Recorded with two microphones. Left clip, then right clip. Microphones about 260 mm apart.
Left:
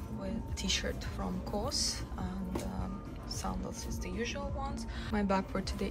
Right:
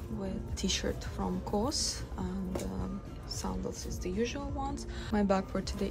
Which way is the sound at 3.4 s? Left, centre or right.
Centre.